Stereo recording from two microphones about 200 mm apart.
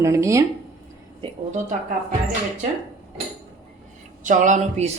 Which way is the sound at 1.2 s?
35° right (ahead or behind).